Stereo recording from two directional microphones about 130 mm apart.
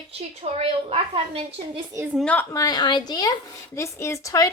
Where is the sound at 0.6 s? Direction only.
50° right (ahead or behind).